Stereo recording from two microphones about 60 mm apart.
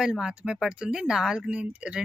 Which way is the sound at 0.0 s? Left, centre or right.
Centre.